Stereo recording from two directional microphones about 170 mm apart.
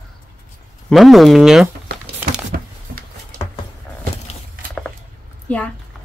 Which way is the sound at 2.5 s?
60° right (ahead or behind).